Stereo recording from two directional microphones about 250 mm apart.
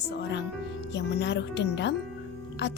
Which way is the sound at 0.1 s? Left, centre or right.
Left.